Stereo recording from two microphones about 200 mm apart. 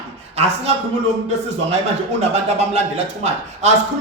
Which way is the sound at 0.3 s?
30° right (ahead or behind).